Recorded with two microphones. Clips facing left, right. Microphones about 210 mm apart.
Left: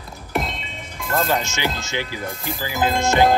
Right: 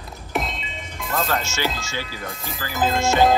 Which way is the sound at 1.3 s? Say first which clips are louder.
Left 2 dB; 15° left (ahead or behind).